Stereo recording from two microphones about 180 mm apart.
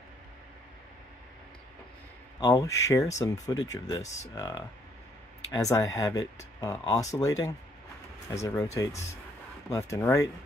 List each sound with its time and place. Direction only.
2.4 s speech: 20° left (ahead or behind)